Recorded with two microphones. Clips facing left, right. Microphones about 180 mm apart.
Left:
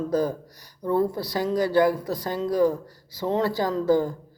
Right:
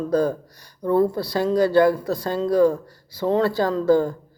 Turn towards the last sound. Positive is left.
turn(degrees=15)  # may be behind; listen again after turning